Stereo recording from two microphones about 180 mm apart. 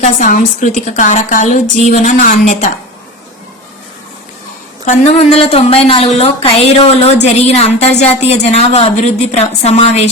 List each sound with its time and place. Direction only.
0.0 s a woman's voice: 50° left (ahead or behind)
4.9 s a woman's voice: 35° left (ahead or behind)